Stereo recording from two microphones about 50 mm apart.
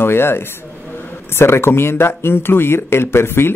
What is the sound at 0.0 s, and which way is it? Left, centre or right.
Speech, left.